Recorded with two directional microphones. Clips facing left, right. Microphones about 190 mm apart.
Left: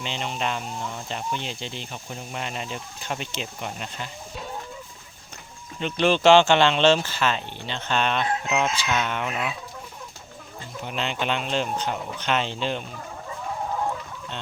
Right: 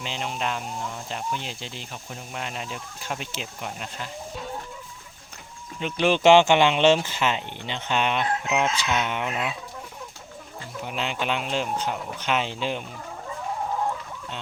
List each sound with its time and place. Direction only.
0.0 s speech: 5° right (ahead or behind)
5.8 s speech: 10° right (ahead or behind)
10.8 s speech: 5° right (ahead or behind)